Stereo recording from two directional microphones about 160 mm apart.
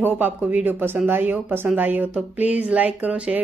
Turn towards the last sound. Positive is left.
turn(degrees=-10)  # may be behind; listen again after turning